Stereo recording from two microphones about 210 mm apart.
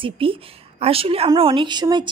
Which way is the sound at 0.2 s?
25° right (ahead or behind).